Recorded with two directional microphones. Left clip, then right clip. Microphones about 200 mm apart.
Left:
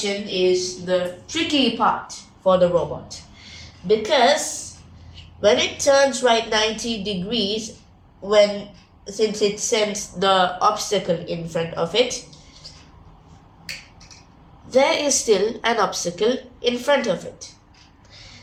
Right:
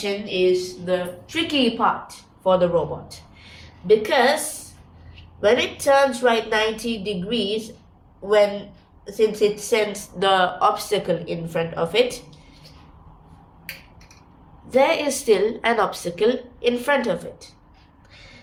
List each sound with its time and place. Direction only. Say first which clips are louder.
0.0 s a woman's voice: even; 15° right (ahead or behind)
3.8 s a woman's voice: even; 20° right (ahead or behind)
5.4 s speech: left 1 dB; 15° right (ahead or behind)
9.0 s speech: right 1 dB; 15° right (ahead or behind)
14.7 s speech: left 1 dB; 15° right (ahead or behind)